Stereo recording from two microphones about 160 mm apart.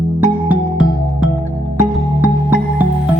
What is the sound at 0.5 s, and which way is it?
Music, 10° right (ahead or behind).